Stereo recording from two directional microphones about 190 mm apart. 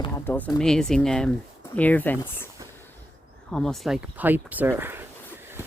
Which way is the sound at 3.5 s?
Centre (ahead or behind).